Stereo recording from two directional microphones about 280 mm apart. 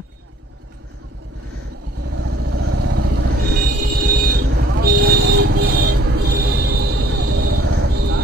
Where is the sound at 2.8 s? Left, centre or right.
Right.